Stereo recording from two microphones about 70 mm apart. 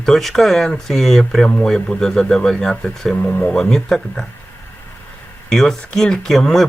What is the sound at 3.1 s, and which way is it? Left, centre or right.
Speech, centre.